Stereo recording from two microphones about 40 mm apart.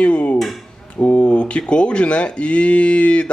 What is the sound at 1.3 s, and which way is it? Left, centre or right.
Speech, left.